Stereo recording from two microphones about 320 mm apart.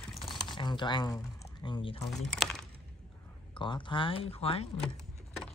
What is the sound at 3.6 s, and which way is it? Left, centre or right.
Speech, centre.